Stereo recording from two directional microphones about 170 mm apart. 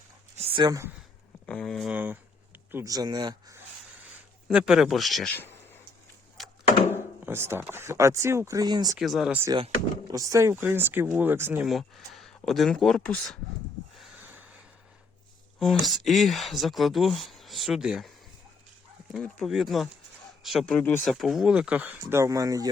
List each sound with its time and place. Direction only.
0.3 s a sound: 25° right (ahead or behind)
1.5 s speech: 5° left (ahead or behind); by 3.6 s 25° right (ahead or behind)
4.4 s speech: 5° right (ahead or behind); by 5.8 s 10° left (ahead or behind)
6.4 s a sound: centre (ahead or behind)
7.3 s speech: 15° right (ahead or behind)
9.0 s speech: centre (ahead or behind)
10.1 s speech: 20° right (ahead or behind)
11.6 s speech: centre (ahead or behind)
14.0 s a sound: 10° right (ahead or behind)
15.5 s speech: centre (ahead or behind)
19.1 s speech: centre (ahead or behind); by 22.7 s 20° right (ahead or behind)